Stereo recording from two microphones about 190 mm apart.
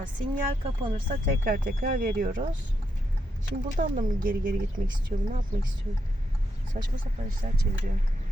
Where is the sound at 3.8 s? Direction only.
45° right (ahead or behind).